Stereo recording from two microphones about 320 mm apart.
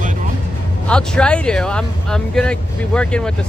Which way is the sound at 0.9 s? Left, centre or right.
Centre.